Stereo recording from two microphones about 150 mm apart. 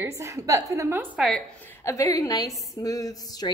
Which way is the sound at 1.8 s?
20° left (ahead or behind).